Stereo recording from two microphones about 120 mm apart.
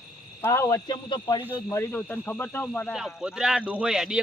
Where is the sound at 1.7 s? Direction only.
20° left (ahead or behind).